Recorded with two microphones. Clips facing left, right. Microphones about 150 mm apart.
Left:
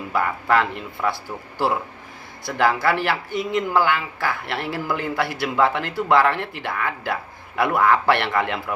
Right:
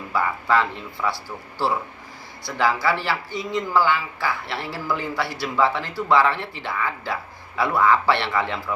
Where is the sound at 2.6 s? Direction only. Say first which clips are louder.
Left 2 dB; 55° left (ahead or behind).